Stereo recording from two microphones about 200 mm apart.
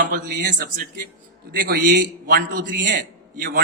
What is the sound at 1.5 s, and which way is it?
Speech, 50° right (ahead or behind).